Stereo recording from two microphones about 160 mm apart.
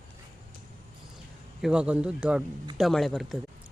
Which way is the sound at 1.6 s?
5° right (ahead or behind).